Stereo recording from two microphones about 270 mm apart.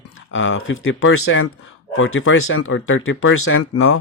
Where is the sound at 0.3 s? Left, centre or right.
Left.